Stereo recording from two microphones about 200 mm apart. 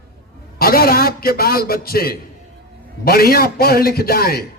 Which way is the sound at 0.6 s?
50° left (ahead or behind).